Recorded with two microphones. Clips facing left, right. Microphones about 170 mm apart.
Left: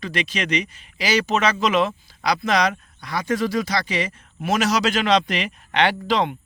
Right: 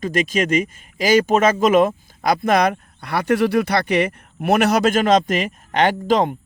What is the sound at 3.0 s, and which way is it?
Speech, 60° right (ahead or behind).